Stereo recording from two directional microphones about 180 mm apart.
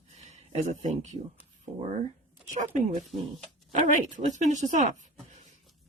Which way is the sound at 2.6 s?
45° right (ahead or behind).